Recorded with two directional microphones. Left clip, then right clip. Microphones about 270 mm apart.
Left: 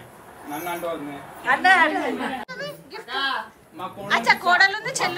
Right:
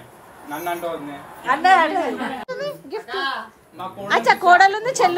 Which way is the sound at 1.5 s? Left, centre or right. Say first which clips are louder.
Right 2 dB; centre.